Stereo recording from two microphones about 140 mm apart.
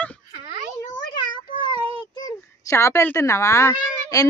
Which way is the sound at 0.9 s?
35° left (ahead or behind).